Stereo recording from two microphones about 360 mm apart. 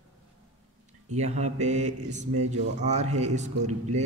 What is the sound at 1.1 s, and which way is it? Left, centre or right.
A man's voice, centre.